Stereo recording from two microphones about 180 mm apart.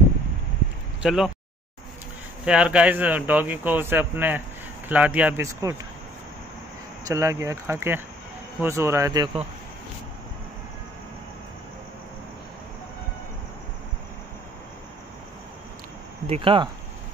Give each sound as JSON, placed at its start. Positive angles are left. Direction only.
{"t": 1.0, "sound": "speech", "side_deg": 0}
{"t": 2.4, "sound": "speech", "side_deg": -5}
{"t": 7.1, "sound": "speech", "side_deg": -15}
{"t": 16.3, "sound": "speech", "side_deg": -30}